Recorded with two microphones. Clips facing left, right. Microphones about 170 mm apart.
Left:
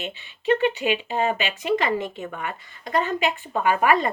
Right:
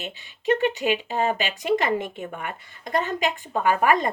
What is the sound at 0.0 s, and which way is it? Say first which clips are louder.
Speech: even; 40° right (ahead or behind).